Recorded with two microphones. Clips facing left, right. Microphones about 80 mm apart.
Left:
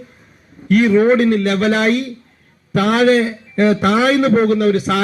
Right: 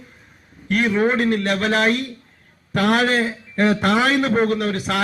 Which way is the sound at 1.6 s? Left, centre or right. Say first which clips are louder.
Left 4 dB; centre.